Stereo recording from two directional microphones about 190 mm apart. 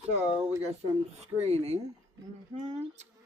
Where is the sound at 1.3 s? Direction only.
35° right (ahead or behind).